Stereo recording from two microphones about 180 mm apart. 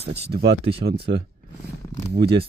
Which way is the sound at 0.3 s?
65° right (ahead or behind).